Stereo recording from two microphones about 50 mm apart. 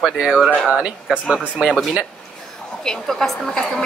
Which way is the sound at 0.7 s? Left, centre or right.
Right.